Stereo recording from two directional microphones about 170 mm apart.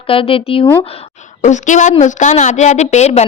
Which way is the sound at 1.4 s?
45° left (ahead or behind).